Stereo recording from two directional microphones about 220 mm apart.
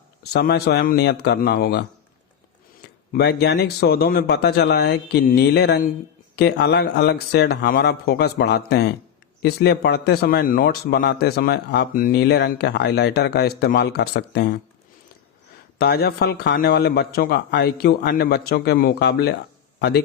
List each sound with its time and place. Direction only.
0.2 s speech: 45° left (ahead or behind)
2.8 s speech: 50° left (ahead or behind)
15.8 s speech: 45° left (ahead or behind)